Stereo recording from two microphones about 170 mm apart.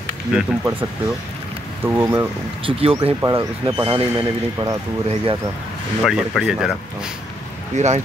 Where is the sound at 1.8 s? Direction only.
15° right (ahead or behind).